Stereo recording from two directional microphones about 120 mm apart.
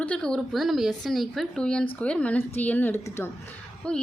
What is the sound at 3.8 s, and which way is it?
Speech, 10° left (ahead or behind).